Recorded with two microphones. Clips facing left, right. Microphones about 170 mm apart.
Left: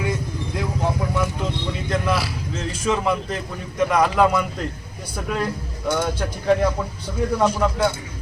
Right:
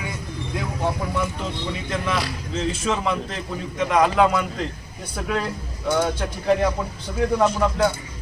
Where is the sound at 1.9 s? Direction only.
5° left (ahead or behind).